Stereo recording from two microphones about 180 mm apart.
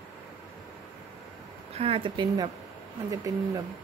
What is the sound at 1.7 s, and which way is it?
A woman's voice, 30° right (ahead or behind).